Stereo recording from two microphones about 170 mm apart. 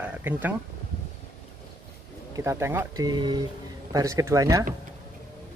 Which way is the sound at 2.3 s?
15° right (ahead or behind).